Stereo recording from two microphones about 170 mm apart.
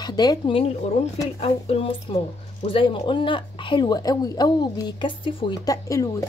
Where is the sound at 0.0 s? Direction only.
25° left (ahead or behind).